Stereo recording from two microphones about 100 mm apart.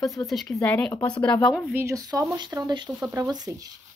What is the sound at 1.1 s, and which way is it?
Speech, 15° left (ahead or behind).